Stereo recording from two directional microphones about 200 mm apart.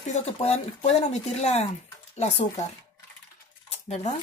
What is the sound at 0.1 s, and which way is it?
Speech, 35° left (ahead or behind).